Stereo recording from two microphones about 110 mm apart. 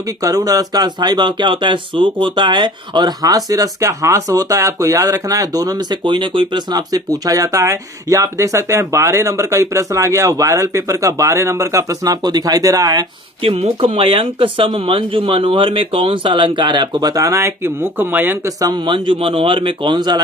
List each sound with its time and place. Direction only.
0.2 s speech: 30° right (ahead or behind)
13.4 s speech: 60° right (ahead or behind); by 18.5 s 20° right (ahead or behind)
18.9 s speech: 50° right (ahead or behind)